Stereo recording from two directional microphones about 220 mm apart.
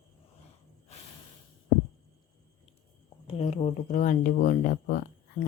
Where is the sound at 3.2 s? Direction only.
30° left (ahead or behind).